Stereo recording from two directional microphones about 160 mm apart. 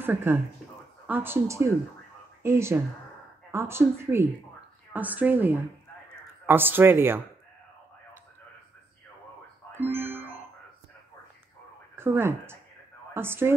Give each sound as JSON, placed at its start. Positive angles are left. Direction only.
{"t": 0.0, "sound": "speech", "side_deg": -15}
{"t": 9.8, "sound": "music", "side_deg": -15}
{"t": 11.9, "sound": "speech", "side_deg": -15}